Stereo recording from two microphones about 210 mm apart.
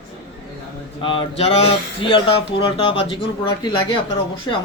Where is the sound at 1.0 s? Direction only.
25° left (ahead or behind).